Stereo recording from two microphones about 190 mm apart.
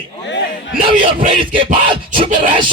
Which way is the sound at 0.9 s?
45° right (ahead or behind).